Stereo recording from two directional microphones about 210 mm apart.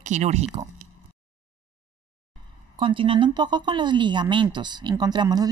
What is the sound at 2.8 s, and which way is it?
Speech, 25° right (ahead or behind).